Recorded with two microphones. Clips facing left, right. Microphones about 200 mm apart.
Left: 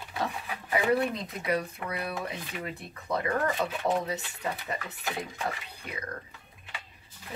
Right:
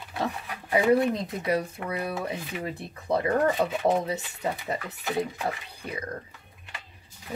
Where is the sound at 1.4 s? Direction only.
25° right (ahead or behind).